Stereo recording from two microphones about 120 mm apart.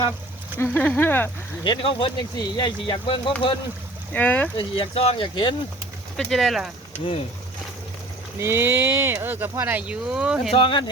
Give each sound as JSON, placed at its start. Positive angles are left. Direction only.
{"t": 0.6, "sound": "speech", "side_deg": 15}
{"t": 1.6, "sound": "speech", "side_deg": 45}
{"t": 4.1, "sound": "speech", "side_deg": 15}
{"t": 4.5, "sound": "speech", "side_deg": 50}
{"t": 6.1, "sound": "speech", "side_deg": 0}
{"t": 8.4, "sound": "speech", "side_deg": -20}
{"t": 10.5, "sound": "speech", "side_deg": 45}